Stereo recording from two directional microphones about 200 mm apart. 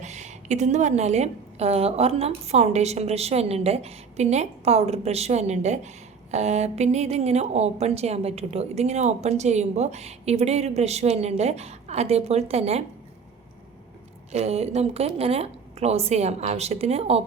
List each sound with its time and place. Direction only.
0.0 s speech: 35° right (ahead or behind)
14.3 s speech: 30° right (ahead or behind)